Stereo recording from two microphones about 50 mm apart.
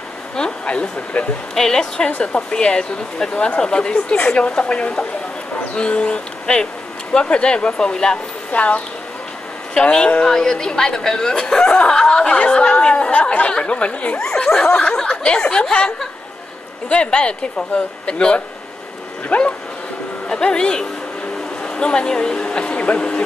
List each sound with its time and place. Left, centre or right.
0.4 s speech: centre
1.5 s speech: centre
2.0 s speech: left
8.5 s speech: left
16.9 s speech: centre